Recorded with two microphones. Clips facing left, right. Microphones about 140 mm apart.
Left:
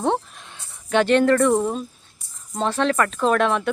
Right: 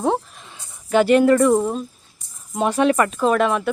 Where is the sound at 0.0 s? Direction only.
Centre (ahead or behind).